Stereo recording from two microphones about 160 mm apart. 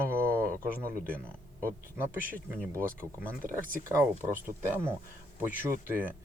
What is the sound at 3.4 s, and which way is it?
Speech, 60° right (ahead or behind).